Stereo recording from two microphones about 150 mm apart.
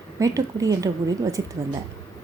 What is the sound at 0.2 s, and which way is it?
Speech, 20° right (ahead or behind).